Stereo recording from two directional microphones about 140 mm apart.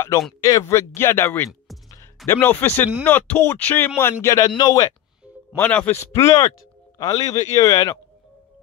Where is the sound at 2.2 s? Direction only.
15° left (ahead or behind).